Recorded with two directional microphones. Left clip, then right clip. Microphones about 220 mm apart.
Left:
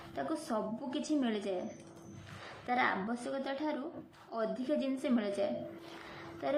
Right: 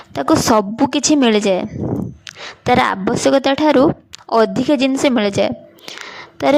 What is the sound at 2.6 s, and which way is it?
A woman's voice, 50° right (ahead or behind).